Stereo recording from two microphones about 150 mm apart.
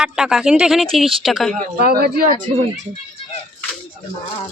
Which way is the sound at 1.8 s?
85° right.